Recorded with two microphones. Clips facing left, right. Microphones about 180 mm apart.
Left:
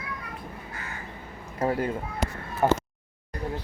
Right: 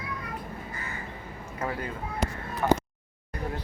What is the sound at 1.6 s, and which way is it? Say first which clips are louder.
Speech: left 7 dB; 30° left (ahead or behind).